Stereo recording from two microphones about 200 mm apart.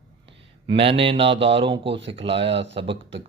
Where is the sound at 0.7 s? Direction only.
25° right (ahead or behind).